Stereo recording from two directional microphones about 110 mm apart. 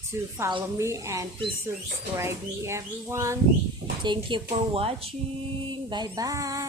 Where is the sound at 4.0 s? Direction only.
45° right (ahead or behind).